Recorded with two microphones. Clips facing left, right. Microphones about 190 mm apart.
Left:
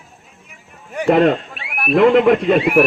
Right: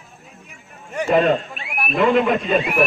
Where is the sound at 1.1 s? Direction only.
70° left (ahead or behind).